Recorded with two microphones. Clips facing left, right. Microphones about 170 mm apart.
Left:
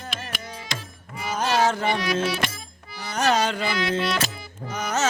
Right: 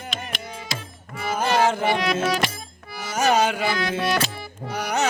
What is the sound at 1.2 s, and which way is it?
Music, 55° right (ahead or behind).